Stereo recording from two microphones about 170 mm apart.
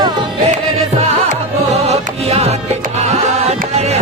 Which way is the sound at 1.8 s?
40° right (ahead or behind).